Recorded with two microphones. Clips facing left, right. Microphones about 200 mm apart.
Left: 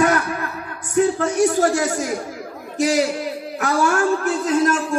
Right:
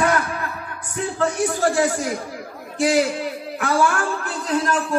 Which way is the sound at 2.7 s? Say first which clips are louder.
Even; 40° left (ahead or behind).